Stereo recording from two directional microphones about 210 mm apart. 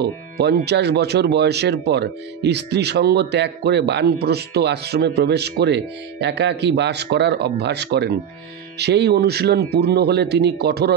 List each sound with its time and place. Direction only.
0.0 s speech: 50° right (ahead or behind)